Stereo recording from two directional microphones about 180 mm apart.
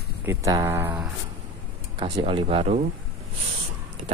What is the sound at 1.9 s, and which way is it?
Speech, 30° right (ahead or behind).